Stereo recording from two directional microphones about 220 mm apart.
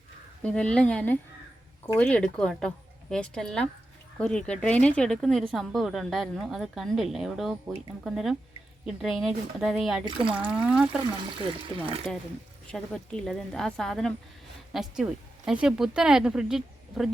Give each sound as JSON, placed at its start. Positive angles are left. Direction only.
{"t": 0.4, "sound": "a woman's voice", "side_deg": 5}
{"t": 11.3, "sound": "speech", "side_deg": -25}
{"t": 12.1, "sound": "a woman's voice", "side_deg": 0}